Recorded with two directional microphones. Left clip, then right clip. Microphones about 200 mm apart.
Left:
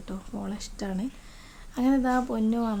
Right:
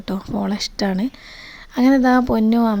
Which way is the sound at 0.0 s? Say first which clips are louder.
Right 13 dB; 40° right (ahead or behind).